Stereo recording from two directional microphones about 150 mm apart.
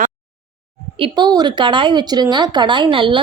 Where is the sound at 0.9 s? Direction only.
35° right (ahead or behind).